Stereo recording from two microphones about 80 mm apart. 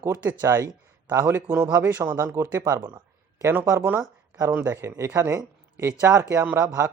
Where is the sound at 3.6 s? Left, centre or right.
Right.